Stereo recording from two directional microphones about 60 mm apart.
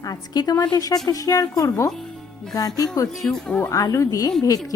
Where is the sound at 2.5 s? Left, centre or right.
Left.